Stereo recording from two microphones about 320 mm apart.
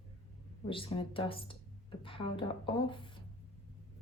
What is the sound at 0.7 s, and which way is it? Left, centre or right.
Speech, centre.